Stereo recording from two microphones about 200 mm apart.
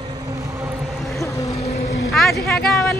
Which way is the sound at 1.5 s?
30° left (ahead or behind).